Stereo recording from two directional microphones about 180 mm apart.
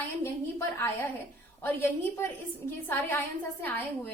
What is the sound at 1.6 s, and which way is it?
A woman's voice, 15° left (ahead or behind).